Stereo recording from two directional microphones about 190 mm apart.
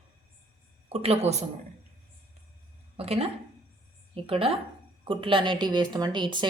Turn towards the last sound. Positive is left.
turn(degrees=-25)  # may be behind; listen again after turning